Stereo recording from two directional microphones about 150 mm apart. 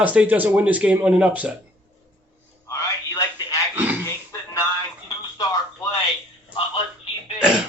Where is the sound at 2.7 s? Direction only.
20° left (ahead or behind).